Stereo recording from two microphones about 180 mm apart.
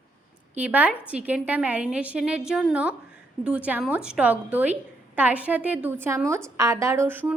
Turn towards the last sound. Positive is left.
turn(degrees=-10)  # may be behind; listen again after turning